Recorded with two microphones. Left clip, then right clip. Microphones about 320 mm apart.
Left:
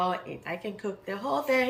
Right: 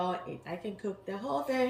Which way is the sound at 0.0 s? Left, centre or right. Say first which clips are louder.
Left 5 dB; centre.